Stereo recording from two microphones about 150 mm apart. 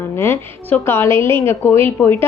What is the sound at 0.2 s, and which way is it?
A woman's voice, 15° left (ahead or behind).